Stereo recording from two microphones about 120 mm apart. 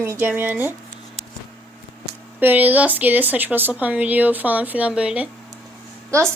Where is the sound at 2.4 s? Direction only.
15° right (ahead or behind).